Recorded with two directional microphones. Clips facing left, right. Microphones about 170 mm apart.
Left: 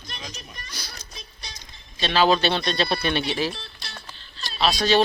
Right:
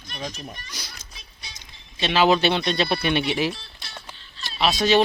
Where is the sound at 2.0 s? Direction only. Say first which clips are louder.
Right 1 dB; 15° right (ahead or behind).